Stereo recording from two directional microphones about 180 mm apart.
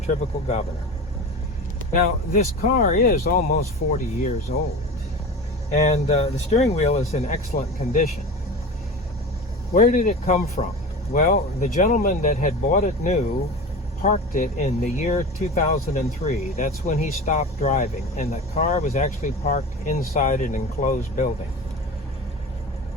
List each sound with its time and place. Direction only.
0.1 s speech: 40° left (ahead or behind)
1.9 s speech: 50° left (ahead or behind)
5.7 s speech: 35° left (ahead or behind)
9.7 s speech: 45° left (ahead or behind)